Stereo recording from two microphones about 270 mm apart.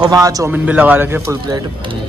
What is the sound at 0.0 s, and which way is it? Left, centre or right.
A man's voice, centre.